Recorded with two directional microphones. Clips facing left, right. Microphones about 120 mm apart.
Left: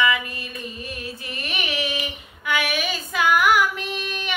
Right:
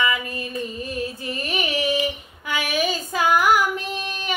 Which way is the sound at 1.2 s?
40° right (ahead or behind).